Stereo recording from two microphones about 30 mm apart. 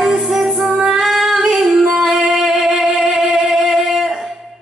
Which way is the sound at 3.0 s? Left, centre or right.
Right.